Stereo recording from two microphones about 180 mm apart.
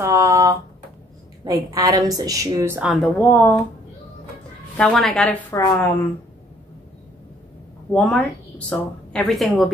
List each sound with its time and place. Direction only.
0.0 s a sound: 15° right (ahead or behind)
1.4 s a woman's voice: 20° right (ahead or behind)
2.9 s speech: 5° left (ahead or behind)
4.7 s a woman's voice: 5° left (ahead or behind)
5.5 s speech: 15° left (ahead or behind)
7.9 s a woman's voice: 5° left (ahead or behind)